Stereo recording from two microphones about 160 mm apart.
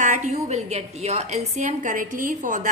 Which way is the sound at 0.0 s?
50° right (ahead or behind).